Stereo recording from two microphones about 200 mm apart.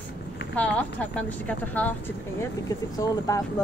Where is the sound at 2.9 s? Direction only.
15° left (ahead or behind).